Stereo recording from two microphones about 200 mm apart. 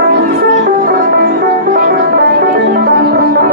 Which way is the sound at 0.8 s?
50° right (ahead or behind).